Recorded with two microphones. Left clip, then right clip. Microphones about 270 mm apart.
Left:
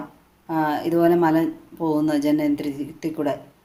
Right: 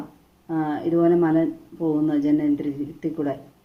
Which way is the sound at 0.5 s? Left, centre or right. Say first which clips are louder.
Left 3 dB; left.